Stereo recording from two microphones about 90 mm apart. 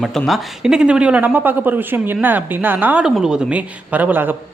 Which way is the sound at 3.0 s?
5° right (ahead or behind).